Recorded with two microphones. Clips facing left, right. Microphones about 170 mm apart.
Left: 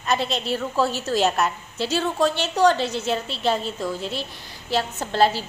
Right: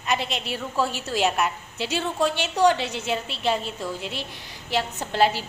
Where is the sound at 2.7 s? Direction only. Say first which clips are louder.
Left 3 dB; 40° left (ahead or behind).